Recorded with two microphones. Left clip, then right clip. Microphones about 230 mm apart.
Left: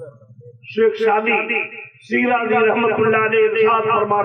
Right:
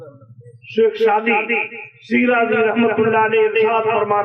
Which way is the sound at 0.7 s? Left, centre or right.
Right.